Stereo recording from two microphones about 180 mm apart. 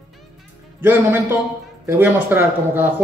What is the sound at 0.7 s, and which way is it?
Speech, 10° right (ahead or behind).